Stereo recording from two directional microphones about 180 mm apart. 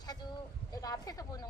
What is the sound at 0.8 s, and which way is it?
Speech, 20° left (ahead or behind).